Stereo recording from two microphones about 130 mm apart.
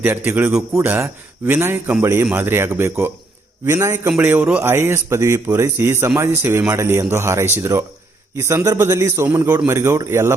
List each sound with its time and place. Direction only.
0.0 s a man's voice: 15° right (ahead or behind)
0.5 s a man's voice: 5° right (ahead or behind)
0.9 s a man's voice: 15° right (ahead or behind)